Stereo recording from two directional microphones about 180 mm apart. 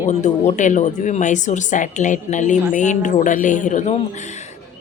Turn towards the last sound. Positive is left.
turn(degrees=45)  # may be behind; listen again after turning